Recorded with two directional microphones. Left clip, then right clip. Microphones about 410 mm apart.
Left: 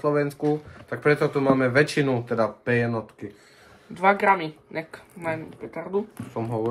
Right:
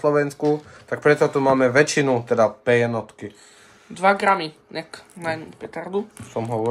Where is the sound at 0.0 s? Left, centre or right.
Centre.